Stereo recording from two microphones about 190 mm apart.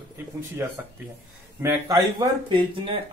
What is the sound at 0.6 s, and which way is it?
Speech, 10° right (ahead or behind).